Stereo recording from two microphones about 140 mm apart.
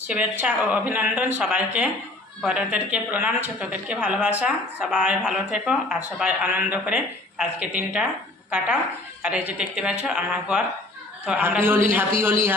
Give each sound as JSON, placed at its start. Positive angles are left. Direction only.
{"t": 0.1, "sound": "speech", "side_deg": -10}